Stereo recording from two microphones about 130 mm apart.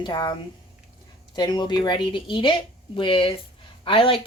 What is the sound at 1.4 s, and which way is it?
Speech, 35° left (ahead or behind).